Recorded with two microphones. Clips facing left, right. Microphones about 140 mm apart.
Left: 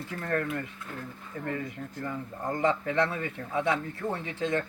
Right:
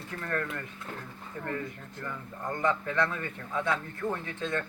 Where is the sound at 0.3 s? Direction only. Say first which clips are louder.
Left 4 dB; 30° left (ahead or behind).